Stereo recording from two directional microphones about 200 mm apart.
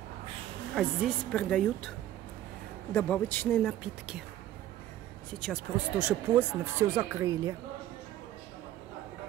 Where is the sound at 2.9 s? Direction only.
10° left (ahead or behind).